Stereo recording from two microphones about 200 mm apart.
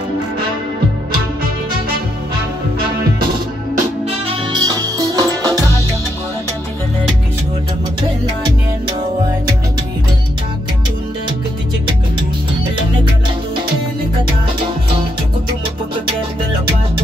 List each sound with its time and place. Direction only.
4.5 s music: 20° right (ahead or behind)